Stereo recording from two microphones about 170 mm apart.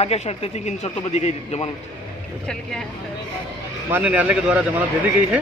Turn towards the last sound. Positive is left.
turn(degrees=-10)  # may be behind; listen again after turning